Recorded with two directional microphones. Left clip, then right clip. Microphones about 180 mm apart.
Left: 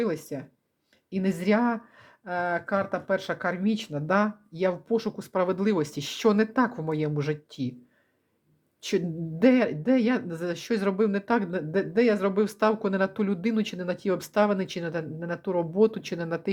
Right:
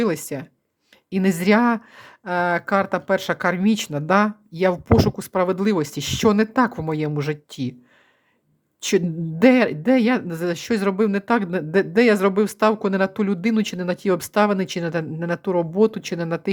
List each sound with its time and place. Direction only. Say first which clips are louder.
0.0 s a woman's voice: right 6 dB; 30° right (ahead or behind)
4.9 s a woman's voice: right 8 dB; 30° right (ahead or behind)
8.8 s a woman's voice: right 7 dB; 25° right (ahead or behind)